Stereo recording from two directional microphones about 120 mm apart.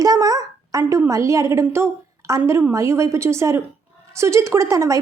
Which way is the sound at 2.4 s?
25° right (ahead or behind).